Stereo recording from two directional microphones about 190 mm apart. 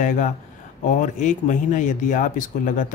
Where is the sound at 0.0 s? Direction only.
40° left (ahead or behind).